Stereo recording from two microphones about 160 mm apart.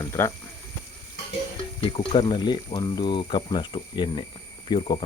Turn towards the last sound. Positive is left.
turn(degrees=30)  # may be behind; listen again after turning